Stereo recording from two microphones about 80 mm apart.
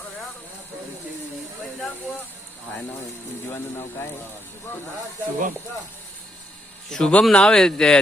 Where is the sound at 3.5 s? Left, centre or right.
Left.